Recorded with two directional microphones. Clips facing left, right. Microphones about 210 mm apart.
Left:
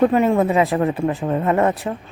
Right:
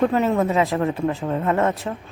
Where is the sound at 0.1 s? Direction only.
10° left (ahead or behind).